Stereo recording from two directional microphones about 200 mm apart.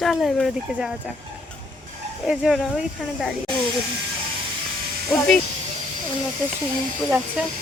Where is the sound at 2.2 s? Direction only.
5° right (ahead or behind).